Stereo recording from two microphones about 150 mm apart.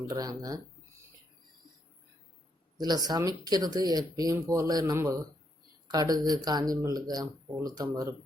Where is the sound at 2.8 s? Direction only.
25° right (ahead or behind).